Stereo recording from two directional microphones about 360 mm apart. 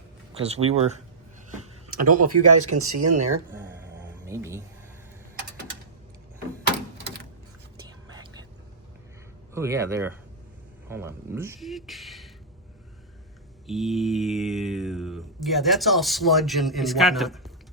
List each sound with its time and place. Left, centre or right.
0.3 s speech: centre
2.0 s speech: right
3.5 s a sound: centre
4.3 s speech: centre
9.6 s speech: centre
10.8 s mantra: centre
13.7 s mantra: centre